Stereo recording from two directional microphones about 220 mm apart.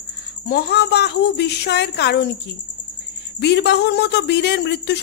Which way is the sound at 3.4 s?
50° left (ahead or behind).